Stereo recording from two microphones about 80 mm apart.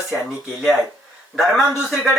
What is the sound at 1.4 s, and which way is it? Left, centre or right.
Speech, centre.